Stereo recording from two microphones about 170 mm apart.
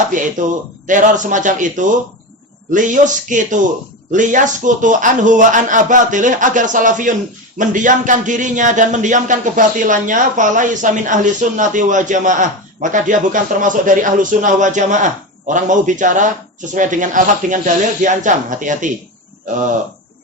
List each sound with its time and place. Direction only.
0.4 s a man's voice: 50° right (ahead or behind)